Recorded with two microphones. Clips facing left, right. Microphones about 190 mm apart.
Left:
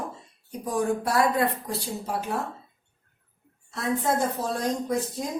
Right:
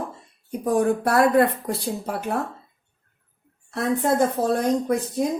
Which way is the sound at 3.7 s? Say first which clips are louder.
Right 4 dB; 60° right (ahead or behind).